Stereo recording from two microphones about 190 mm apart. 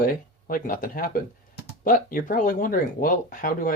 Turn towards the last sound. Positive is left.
turn(degrees=45)  # may be behind; listen again after turning